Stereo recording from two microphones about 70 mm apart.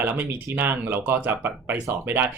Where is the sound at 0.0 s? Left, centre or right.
Right.